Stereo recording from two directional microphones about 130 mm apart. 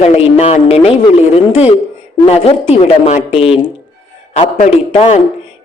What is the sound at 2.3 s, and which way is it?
A woman's voice, 50° left (ahead or behind).